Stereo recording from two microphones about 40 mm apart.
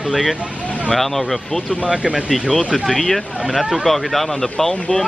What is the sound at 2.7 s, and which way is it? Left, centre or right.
Speech, centre.